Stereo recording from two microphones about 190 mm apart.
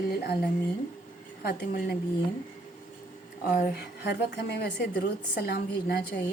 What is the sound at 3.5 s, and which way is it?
A woman's voice, 60° left (ahead or behind).